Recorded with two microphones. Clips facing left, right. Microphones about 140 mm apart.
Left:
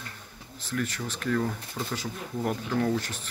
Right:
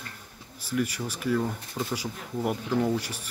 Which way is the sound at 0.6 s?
10° right (ahead or behind).